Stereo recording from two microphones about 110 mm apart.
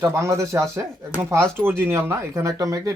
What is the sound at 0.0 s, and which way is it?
Speech, 30° right (ahead or behind).